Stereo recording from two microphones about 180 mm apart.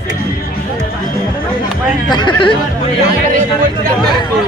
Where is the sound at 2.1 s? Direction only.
25° left (ahead or behind).